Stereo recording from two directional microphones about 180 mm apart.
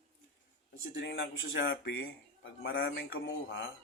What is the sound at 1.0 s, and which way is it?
A man's voice, 80° left.